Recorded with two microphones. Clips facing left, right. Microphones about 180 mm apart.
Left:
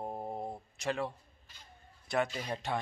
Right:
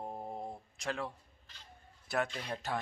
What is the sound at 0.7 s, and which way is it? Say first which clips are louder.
A man's voice: left 4 dB; 5° left (ahead or behind).